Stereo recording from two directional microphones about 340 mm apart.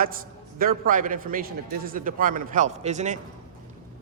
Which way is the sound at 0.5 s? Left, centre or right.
Right.